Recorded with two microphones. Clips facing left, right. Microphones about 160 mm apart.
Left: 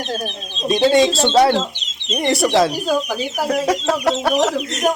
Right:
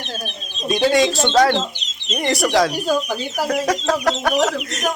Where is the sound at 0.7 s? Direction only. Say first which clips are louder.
Left 2 dB; 30° left (ahead or behind).